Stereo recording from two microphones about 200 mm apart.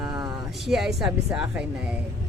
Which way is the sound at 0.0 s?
20° right (ahead or behind).